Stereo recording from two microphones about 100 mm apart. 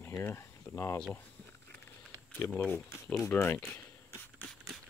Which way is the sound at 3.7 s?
20° left (ahead or behind).